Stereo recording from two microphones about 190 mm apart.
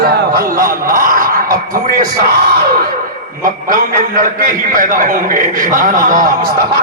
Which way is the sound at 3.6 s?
45° right (ahead or behind).